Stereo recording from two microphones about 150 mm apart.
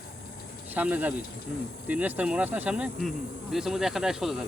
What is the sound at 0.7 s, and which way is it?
Speech, 10° right (ahead or behind).